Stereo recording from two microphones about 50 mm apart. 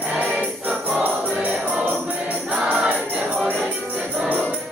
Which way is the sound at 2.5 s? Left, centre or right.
Centre.